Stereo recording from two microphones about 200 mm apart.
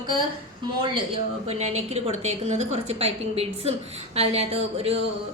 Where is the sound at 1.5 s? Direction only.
30° right (ahead or behind).